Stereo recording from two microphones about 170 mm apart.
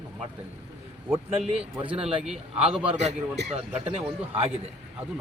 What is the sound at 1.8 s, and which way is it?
Speech, 30° right (ahead or behind).